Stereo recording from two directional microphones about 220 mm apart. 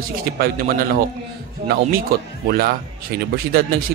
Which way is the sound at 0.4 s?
40° right (ahead or behind).